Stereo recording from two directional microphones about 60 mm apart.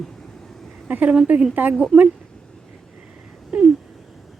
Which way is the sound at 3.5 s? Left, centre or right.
Centre.